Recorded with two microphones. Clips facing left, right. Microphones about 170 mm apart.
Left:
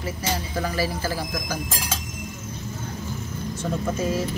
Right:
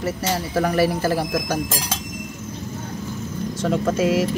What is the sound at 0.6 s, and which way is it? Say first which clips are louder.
Speech: right 9 dB; 65° right (ahead or behind).